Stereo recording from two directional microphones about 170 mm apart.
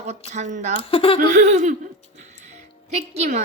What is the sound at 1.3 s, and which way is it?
Speech, 45° right (ahead or behind).